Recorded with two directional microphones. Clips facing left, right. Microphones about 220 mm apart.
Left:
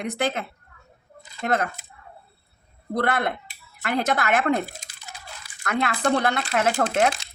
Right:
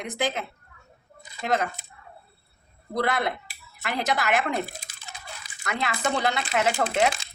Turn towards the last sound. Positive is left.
turn(degrees=50)  # may be behind; listen again after turning